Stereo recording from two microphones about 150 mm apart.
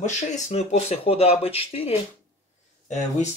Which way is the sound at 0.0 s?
50° left (ahead or behind).